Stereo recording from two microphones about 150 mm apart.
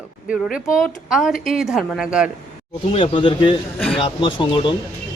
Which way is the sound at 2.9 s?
35° left (ahead or behind).